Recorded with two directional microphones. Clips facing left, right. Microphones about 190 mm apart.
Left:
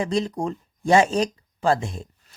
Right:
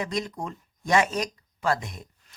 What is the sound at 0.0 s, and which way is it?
Speech, 30° left (ahead or behind).